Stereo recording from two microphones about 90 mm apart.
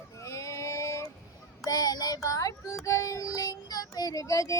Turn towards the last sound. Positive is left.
turn(degrees=35)  # may be behind; listen again after turning